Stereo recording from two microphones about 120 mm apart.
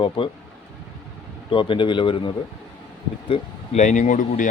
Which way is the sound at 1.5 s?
45° left (ahead or behind).